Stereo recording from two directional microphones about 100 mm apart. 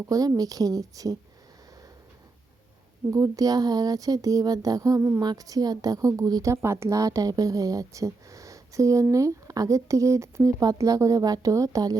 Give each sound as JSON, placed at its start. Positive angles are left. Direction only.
{"t": 0.1, "sound": "a woman's voice", "side_deg": -40}
{"t": 3.1, "sound": "a woman's voice", "side_deg": -35}
{"t": 5.2, "sound": "a woman's voice", "side_deg": -40}